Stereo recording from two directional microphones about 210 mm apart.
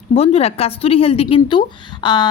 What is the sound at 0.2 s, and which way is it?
A woman's voice, 30° left (ahead or behind).